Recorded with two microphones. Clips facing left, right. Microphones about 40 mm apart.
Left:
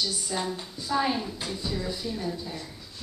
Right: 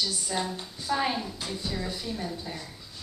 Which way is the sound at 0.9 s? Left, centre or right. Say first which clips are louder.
Left 1 dB; centre.